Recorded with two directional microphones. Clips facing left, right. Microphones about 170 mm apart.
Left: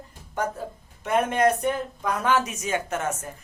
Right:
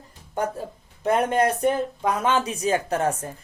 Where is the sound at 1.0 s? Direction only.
35° right (ahead or behind).